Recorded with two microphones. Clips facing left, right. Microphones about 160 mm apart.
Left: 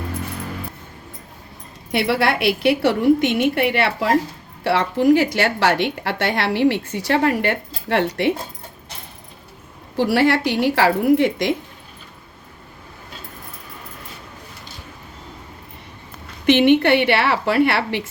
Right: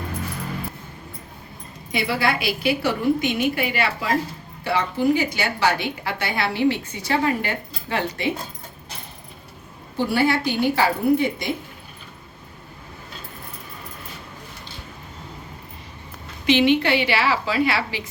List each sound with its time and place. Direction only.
1.9 s a woman's voice: 70° left (ahead or behind)
4.6 s a woman's voice: 85° left
10.0 s a woman's voice: 90° left
16.5 s a woman's voice: 60° left (ahead or behind)